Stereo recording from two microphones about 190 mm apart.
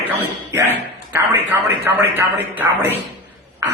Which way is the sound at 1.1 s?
10° right (ahead or behind).